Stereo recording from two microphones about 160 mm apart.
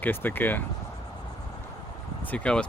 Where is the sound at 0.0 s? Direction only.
10° left (ahead or behind).